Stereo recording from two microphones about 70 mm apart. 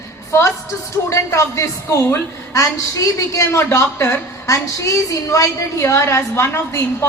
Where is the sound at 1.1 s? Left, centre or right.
Left.